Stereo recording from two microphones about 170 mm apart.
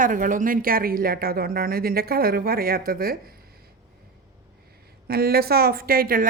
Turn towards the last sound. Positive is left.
turn(degrees=-60)  # may be behind; listen again after turning